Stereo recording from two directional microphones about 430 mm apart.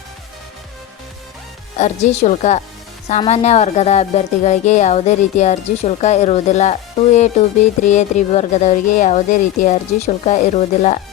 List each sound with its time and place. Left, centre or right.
1.8 s speech: centre